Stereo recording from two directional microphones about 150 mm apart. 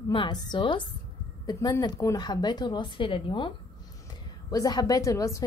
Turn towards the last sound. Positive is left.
turn(degrees=20)  # may be behind; listen again after turning